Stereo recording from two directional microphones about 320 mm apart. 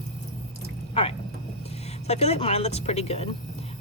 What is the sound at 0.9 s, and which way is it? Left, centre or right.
Speech, centre.